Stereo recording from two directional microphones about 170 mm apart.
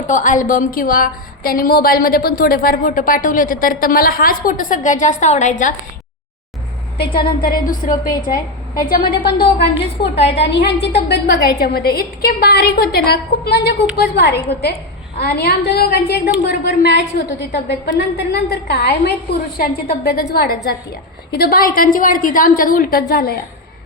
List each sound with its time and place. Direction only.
0.1 s a woman's voice: 50° left (ahead or behind)
7.4 s a woman's voice: 55° left (ahead or behind)
17.8 s a woman's voice: 85° left; by 23.3 s 60° left (ahead or behind)